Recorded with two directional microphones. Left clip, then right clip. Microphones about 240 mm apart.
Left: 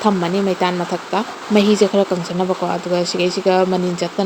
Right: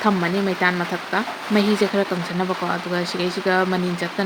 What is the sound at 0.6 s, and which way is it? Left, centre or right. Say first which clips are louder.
Speech: left 2 dB; centre.